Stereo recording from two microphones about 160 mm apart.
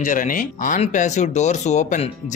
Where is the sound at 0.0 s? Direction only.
55° left (ahead or behind).